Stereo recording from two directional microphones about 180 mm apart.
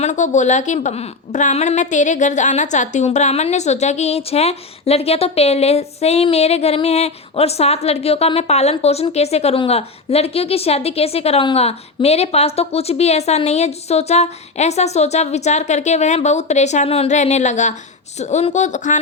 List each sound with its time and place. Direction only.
0.0 s a woman's voice: 40° left (ahead or behind)